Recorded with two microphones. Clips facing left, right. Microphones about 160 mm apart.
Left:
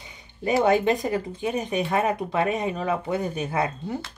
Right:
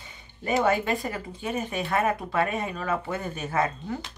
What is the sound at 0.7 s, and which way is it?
Speech, 20° left (ahead or behind).